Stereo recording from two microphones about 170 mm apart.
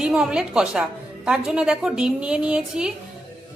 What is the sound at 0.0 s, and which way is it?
A woman's voice, 5° right (ahead or behind).